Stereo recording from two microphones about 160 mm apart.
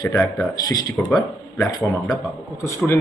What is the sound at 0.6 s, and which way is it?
A man's voice, 25° left (ahead or behind).